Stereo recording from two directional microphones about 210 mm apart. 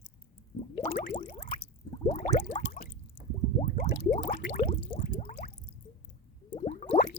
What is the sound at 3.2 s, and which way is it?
Squish, 65° left (ahead or behind).